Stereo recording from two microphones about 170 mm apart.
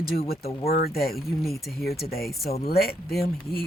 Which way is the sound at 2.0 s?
65° left (ahead or behind).